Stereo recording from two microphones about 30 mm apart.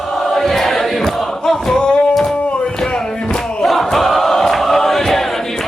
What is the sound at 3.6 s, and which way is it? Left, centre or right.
Crowd, centre.